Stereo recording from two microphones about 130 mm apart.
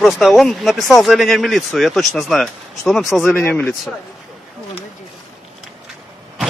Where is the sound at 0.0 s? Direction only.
Centre (ahead or behind).